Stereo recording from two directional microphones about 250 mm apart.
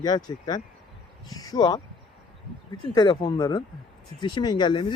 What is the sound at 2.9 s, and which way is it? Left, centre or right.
Speech, centre.